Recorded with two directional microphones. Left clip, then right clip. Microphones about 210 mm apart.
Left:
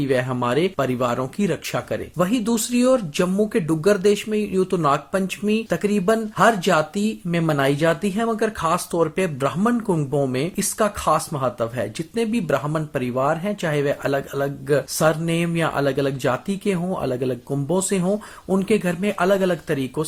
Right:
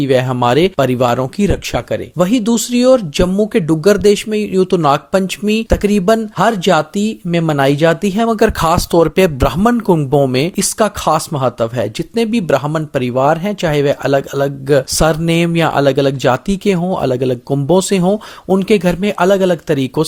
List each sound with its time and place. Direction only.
0.0 s speech: 40° right (ahead or behind)